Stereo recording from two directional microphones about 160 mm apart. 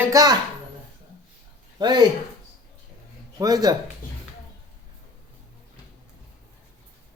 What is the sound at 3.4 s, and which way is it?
Speech, 25° right (ahead or behind).